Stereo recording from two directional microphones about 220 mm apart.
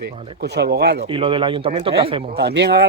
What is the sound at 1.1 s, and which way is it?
A man's voice, 25° right (ahead or behind).